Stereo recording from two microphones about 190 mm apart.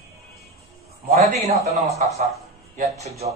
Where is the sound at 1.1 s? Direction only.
35° right (ahead or behind).